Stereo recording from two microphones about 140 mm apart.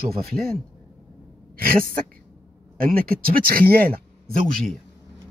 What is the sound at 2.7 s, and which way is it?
Speech, 90° right.